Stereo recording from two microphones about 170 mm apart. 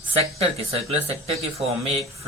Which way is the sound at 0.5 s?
35° right (ahead or behind).